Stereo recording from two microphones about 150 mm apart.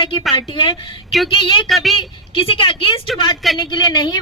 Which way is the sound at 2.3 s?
35° left (ahead or behind).